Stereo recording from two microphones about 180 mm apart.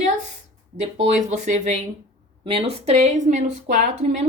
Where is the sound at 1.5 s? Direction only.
40° right (ahead or behind).